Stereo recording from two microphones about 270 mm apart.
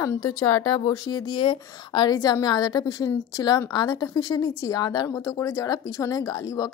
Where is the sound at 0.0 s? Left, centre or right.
Centre.